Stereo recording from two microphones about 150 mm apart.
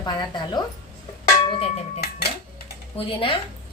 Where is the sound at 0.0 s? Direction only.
30° left (ahead or behind).